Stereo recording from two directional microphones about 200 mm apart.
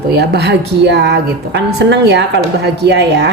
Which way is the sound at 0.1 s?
55° right (ahead or behind).